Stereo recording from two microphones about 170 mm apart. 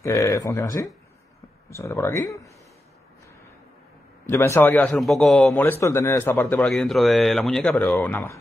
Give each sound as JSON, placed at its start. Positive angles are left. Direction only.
{"t": 0.0, "sound": "a man's voice", "side_deg": 20}
{"t": 4.3, "sound": "a man's voice", "side_deg": 15}